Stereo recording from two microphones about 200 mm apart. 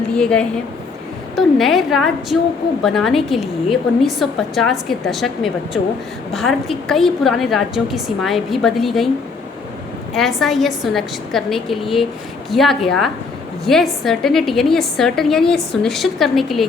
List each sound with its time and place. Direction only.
0.1 s a woman's voice: 5° left (ahead or behind)
10.2 s a woman's voice: centre (ahead or behind)